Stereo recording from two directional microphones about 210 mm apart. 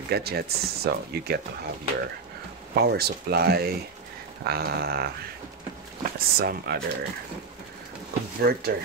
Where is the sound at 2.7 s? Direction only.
50° right (ahead or behind).